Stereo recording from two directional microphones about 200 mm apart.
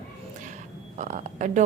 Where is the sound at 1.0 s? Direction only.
40° right (ahead or behind).